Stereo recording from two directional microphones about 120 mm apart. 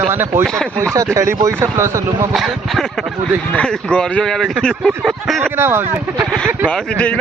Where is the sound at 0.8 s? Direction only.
25° right (ahead or behind).